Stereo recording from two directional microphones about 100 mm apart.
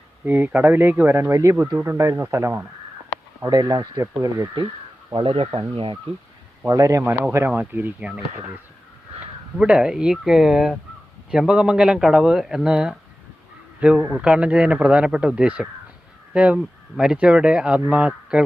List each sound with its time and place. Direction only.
0.3 s speech: 15° right (ahead or behind); by 3.8 s 40° right (ahead or behind)
5.1 s speech: 70° right (ahead or behind)
6.7 s speech: 35° right (ahead or behind)
7.0 s speech: 15° right (ahead or behind)
9.2 s speech: 10° right (ahead or behind)